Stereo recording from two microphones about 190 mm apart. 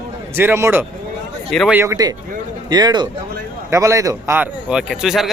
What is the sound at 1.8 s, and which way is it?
A man's voice, 15° right (ahead or behind).